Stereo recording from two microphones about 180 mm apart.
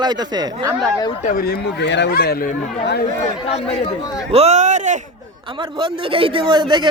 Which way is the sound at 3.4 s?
35° left (ahead or behind).